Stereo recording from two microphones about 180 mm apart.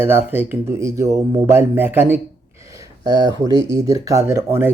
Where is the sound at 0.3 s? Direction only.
10° right (ahead or behind).